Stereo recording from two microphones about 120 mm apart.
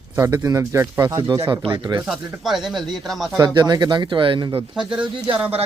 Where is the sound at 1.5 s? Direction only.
45° right (ahead or behind).